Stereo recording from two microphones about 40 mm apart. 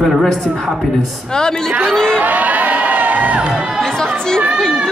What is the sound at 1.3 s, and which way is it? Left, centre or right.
Speech, centre.